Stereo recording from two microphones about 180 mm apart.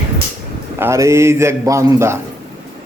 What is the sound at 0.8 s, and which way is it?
A man's voice, 15° right (ahead or behind).